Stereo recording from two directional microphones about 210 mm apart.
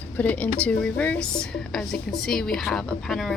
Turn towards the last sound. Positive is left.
turn(degrees=0)  # may be behind; listen again after turning